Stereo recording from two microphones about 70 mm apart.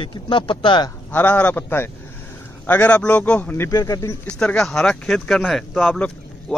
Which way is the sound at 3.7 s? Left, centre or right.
Left.